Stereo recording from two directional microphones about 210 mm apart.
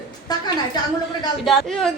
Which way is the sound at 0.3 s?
20° left (ahead or behind).